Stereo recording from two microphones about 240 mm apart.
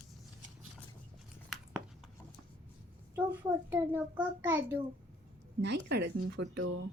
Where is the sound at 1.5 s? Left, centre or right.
Centre.